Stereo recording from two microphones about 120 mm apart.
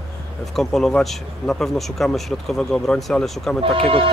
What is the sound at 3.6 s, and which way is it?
Speech, 50° right (ahead or behind).